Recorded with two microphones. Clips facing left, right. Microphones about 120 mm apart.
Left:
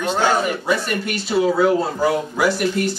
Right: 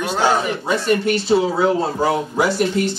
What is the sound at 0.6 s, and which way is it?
Speech, 25° right (ahead or behind).